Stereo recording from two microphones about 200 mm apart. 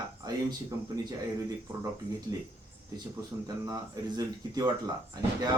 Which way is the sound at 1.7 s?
25° right (ahead or behind).